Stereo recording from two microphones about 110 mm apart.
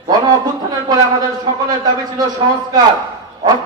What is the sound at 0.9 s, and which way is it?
A man's voice, 35° right (ahead or behind).